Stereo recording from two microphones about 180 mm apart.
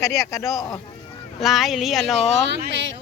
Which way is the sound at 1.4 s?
Centre (ahead or behind).